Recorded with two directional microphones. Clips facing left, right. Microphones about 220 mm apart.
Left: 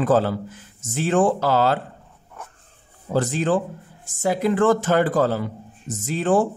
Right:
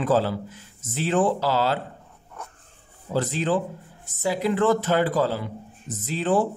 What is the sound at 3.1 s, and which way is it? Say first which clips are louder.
Speech: left 3 dB; 50° left (ahead or behind).